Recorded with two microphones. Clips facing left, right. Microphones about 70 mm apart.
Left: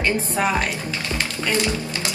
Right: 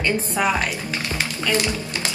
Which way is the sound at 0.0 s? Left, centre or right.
Left.